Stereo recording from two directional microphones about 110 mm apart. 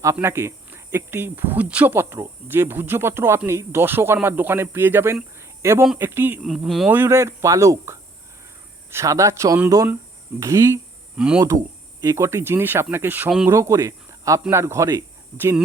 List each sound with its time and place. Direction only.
0.0 s speech: 25° right (ahead or behind)
5.4 s cricket: 25° right (ahead or behind)
6.0 s speech: 20° right (ahead or behind)
6.4 s speech: centre (ahead or behind)
6.8 s speech: 20° right (ahead or behind)
11.2 s speech: 10° right (ahead or behind)
12.0 s speech: 25° right (ahead or behind)
13.5 s speech: 25° right (ahead or behind)